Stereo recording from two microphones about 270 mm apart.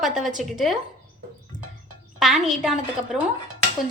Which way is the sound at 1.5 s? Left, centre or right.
Right.